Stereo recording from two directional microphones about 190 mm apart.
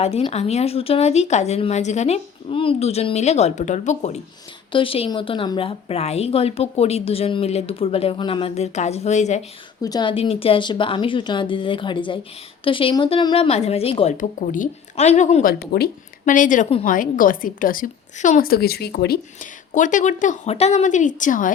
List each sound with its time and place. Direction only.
0.0 s a woman's voice: 30° left (ahead or behind)
9.8 s a woman's voice: 20° left (ahead or behind); by 15.5 s 40° left (ahead or behind)
15.5 s a woman's voice: 55° left (ahead or behind)
19.7 s a woman's voice: 40° left (ahead or behind)